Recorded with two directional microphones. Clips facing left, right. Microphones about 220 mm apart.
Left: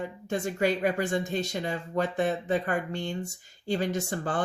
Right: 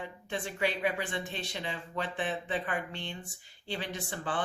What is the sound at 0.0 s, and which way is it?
Speech, 40° left (ahead or behind).